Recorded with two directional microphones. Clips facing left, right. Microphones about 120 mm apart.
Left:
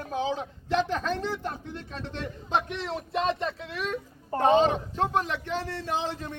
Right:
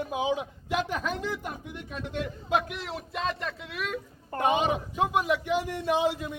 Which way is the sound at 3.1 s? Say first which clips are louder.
Left 5 dB; 30° left (ahead or behind).